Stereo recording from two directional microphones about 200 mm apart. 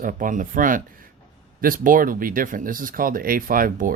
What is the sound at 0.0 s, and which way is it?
Speech, 40° right (ahead or behind).